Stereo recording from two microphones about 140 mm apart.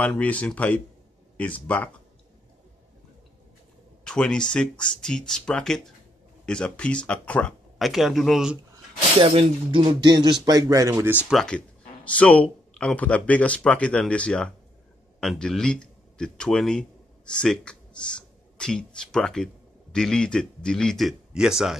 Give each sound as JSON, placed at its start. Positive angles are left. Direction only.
{"t": 0.0, "sound": "speech", "side_deg": 10}
{"t": 4.0, "sound": "speech", "side_deg": 5}
{"t": 9.2, "sound": "speech", "side_deg": -40}
{"t": 11.1, "sound": "a man's voice", "side_deg": 0}